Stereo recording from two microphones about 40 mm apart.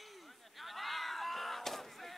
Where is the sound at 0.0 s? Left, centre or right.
Centre.